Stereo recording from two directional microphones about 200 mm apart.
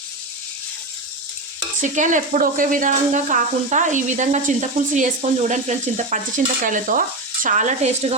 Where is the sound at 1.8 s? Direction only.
40° right (ahead or behind).